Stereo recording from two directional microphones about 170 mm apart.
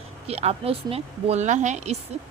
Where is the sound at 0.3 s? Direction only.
35° right (ahead or behind).